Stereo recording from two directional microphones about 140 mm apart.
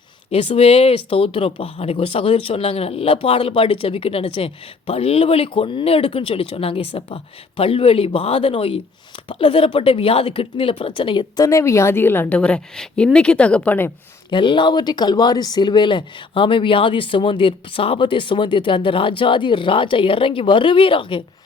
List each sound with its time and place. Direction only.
0.3 s a woman's voice: 45° left (ahead or behind); by 13.9 s 15° left (ahead or behind)
14.3 s speech: 35° left (ahead or behind)